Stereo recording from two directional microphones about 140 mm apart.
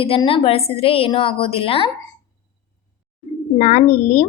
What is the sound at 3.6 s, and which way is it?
Speech, 55° left (ahead or behind).